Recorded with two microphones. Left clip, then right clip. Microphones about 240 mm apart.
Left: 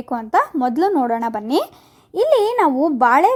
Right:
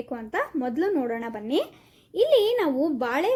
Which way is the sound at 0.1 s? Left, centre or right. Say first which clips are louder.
Left 12 dB; left.